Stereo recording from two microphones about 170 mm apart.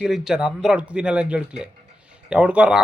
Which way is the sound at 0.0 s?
5° right (ahead or behind).